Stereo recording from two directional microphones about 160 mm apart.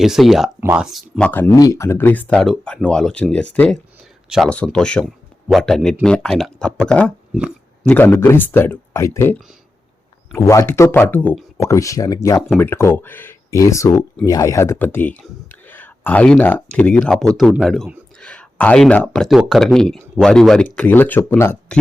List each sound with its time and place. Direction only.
0.0 s speech: centre (ahead or behind)
0.6 s speech: 15° right (ahead or behind)
0.9 s speech: centre (ahead or behind)
1.3 s speech: 20° left (ahead or behind)
7.3 s speech: 10° right (ahead or behind)
7.9 s speech: 15° left (ahead or behind)